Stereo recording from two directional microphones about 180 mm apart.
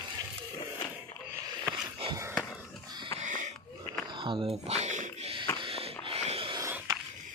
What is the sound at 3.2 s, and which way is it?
Wheeze, 45° right (ahead or behind).